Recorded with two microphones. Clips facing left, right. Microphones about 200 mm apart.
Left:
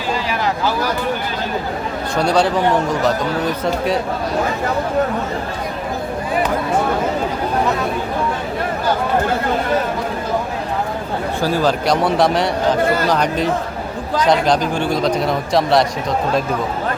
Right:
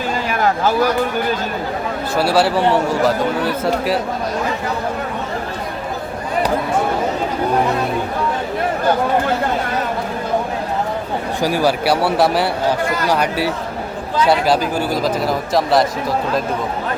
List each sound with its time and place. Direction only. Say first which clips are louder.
0.3 s a sound: right 5 dB; 50° right (ahead or behind)
2.1 s speech: even; 5° right (ahead or behind)
11.3 s a man's voice: right 1 dB; 15° right (ahead or behind)